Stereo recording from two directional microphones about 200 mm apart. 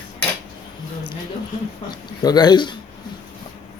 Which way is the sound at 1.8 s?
20° left (ahead or behind).